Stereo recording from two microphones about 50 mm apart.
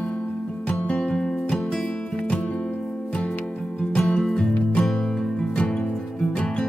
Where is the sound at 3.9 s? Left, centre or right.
Centre.